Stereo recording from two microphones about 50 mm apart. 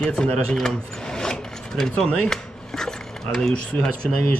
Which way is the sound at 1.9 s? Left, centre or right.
Left.